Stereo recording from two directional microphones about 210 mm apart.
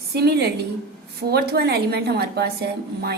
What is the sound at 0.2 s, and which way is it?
A woman's voice, 50° right (ahead or behind).